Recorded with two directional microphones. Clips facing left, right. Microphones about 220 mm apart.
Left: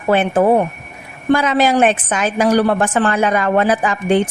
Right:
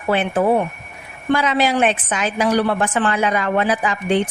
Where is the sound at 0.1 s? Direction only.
45° left (ahead or behind).